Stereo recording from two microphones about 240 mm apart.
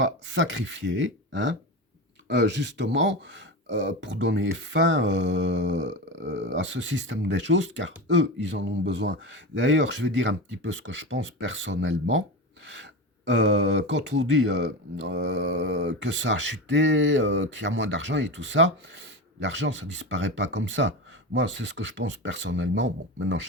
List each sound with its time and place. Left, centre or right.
0.0 s speech: right